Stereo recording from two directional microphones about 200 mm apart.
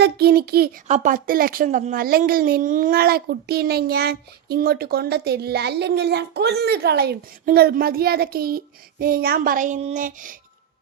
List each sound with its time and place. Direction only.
0.0 s speech: 50° right (ahead or behind)
0.9 s speech: 35° right (ahead or behind)